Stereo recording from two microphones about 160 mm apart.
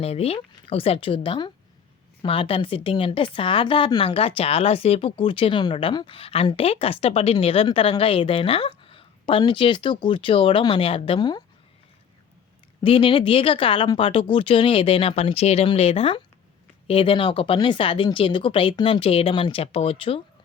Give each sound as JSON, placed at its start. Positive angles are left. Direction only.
{"t": 0.0, "sound": "a woman's voice", "side_deg": 40}
{"t": 12.8, "sound": "a woman's voice", "side_deg": 35}